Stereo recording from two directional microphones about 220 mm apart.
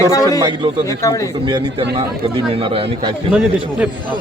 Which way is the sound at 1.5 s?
20° right (ahead or behind).